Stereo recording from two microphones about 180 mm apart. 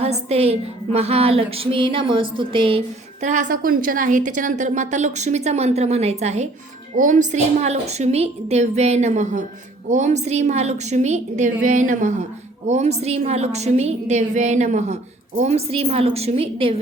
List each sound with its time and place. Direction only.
0.0 s a woman's voice: 35° right (ahead or behind)